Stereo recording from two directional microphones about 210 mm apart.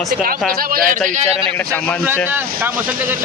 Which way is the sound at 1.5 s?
10° left (ahead or behind).